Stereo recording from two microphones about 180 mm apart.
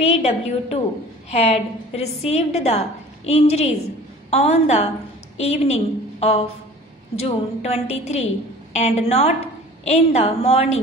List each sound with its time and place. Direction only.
0.0 s a woman's voice: 35° left (ahead or behind)